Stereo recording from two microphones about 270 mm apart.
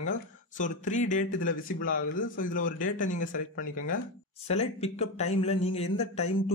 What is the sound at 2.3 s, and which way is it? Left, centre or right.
Speech, left.